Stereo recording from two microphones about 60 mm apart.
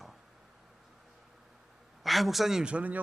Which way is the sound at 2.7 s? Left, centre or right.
Right.